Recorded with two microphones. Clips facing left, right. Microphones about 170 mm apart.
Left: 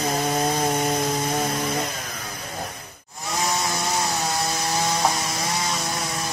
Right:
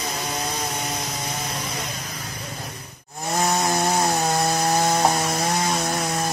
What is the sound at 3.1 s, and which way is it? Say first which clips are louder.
Chainsaw: right 4 dB; 45° right (ahead or behind).